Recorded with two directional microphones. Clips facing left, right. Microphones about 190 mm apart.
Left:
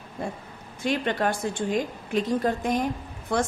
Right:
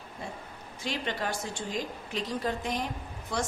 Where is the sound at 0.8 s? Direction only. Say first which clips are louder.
Left 8 dB; 55° left (ahead or behind).